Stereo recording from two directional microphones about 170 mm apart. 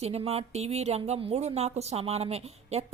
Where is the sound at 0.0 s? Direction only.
40° right (ahead or behind).